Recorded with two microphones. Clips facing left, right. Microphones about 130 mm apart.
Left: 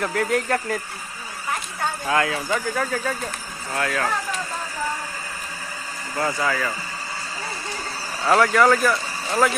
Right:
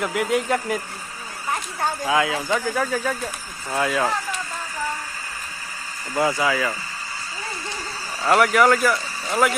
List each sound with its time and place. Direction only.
0.0 s speech: 15° right (ahead or behind)
2.0 s speech: 10° right (ahead or behind)
6.1 s speech: 10° right (ahead or behind)
8.2 s speech: centre (ahead or behind)